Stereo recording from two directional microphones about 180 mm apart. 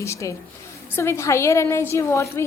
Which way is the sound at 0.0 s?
15° left (ahead or behind).